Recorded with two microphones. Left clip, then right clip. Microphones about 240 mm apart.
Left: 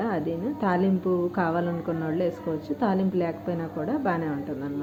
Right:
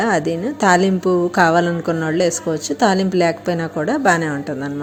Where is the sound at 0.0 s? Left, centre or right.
Right.